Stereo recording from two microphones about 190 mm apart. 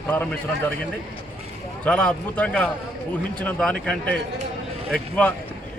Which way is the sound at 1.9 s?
5° left (ahead or behind).